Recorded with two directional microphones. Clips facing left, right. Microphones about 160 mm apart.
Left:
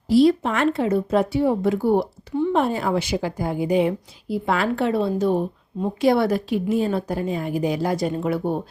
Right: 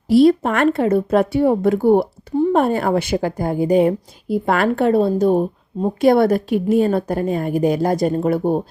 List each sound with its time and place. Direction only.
0.1 s speech: 55° right (ahead or behind)